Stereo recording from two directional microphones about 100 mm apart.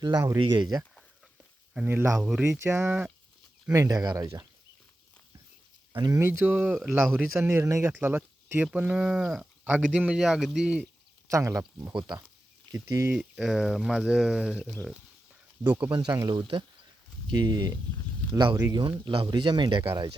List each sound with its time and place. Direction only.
0.3 s speech: 50° right (ahead or behind)
1.7 s speech: 20° right (ahead or behind)
2.1 s speech: 5° right (ahead or behind)
2.4 s speech: 25° right (ahead or behind)
3.7 s speech: 35° right (ahead or behind)
6.1 s speech: 25° right (ahead or behind)
6.7 s speech: 5° left (ahead or behind)
7.3 s a man's voice: 25° right (ahead or behind); by 10.8 s 10° right (ahead or behind)
11.3 s speech: 30° right (ahead or behind)
11.9 s speech: 45° right (ahead or behind)
12.7 s speech: 35° right (ahead or behind)
13.1 s a man's voice: 5° right (ahead or behind)
15.9 s speech: 50° right (ahead or behind)
17.2 s speech: 45° right (ahead or behind)